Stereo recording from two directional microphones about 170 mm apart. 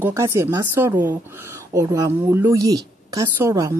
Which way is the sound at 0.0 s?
15° right (ahead or behind).